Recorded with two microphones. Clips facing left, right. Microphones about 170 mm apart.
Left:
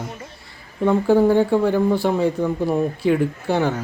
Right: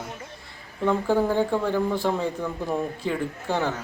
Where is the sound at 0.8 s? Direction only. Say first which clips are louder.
Left 6 dB; 20° left (ahead or behind).